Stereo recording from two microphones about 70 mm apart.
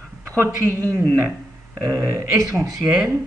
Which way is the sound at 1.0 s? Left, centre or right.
Right.